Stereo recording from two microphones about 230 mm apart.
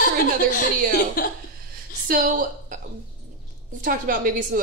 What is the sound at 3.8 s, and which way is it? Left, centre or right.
Speech, right.